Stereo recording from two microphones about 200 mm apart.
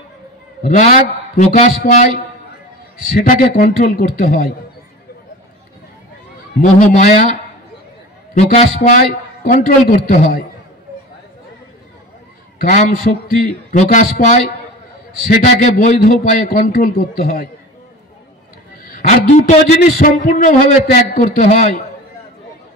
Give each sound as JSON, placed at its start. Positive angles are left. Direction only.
{"t": 0.6, "sound": "a man's voice", "side_deg": 45}
{"t": 6.6, "sound": "a man's voice", "side_deg": 35}
{"t": 8.4, "sound": "a man's voice", "side_deg": 40}
{"t": 12.5, "sound": "a man's voice", "side_deg": 40}
{"t": 18.9, "sound": "a man's voice", "side_deg": 40}